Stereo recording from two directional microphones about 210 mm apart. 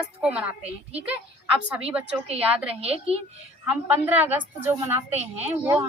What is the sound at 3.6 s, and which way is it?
A woman's voice, 10° right (ahead or behind).